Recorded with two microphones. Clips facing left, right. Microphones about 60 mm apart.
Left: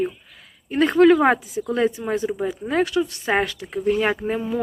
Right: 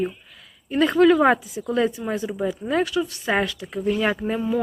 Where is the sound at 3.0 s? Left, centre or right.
Left.